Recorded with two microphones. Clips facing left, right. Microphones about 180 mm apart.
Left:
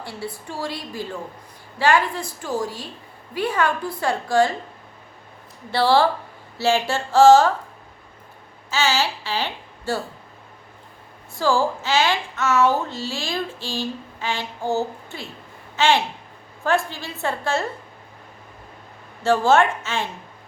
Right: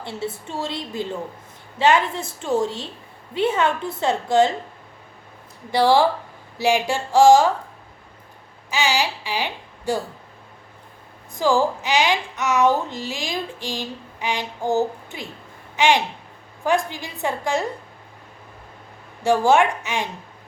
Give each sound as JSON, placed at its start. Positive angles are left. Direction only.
{"t": 0.0, "sound": "a woman's voice", "side_deg": -25}
{"t": 5.7, "sound": "speech", "side_deg": -15}
{"t": 8.7, "sound": "a woman's voice", "side_deg": -15}
{"t": 11.3, "sound": "a child's voice", "side_deg": -15}
{"t": 19.2, "sound": "speech", "side_deg": -15}